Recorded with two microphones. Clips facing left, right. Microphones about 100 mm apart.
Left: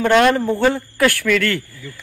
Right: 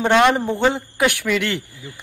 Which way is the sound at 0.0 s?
20° right (ahead or behind).